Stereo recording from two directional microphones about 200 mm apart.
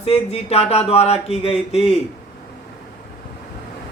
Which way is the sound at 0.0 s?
30° left (ahead or behind).